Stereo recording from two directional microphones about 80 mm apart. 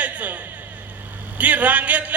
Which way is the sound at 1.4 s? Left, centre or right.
Centre.